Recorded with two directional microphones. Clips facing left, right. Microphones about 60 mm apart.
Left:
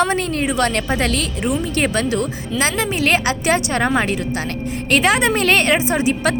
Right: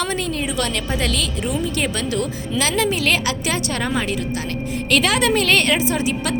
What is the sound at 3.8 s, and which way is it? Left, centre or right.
A woman's voice, left.